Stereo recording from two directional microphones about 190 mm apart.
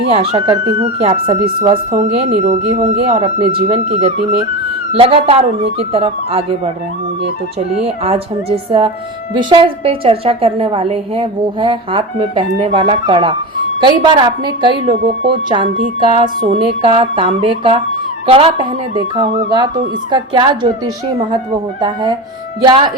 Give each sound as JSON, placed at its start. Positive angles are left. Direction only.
{"t": 0.1, "sound": "speech", "side_deg": -30}
{"t": 7.9, "sound": "a woman's voice", "side_deg": -30}